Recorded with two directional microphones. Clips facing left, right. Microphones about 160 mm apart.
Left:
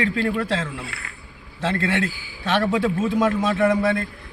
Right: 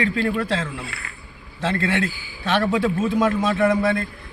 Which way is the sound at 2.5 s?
15° left (ahead or behind).